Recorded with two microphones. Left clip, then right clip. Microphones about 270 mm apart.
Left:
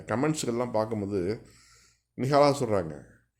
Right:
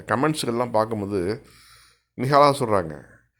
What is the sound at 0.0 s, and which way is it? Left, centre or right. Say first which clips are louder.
Speech: right 6 dB; centre.